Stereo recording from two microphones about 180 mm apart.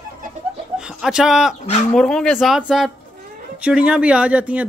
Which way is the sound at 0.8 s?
5° right (ahead or behind).